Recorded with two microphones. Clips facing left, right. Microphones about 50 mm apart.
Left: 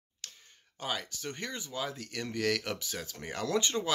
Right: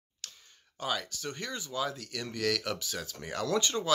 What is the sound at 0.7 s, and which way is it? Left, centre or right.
Speech, left.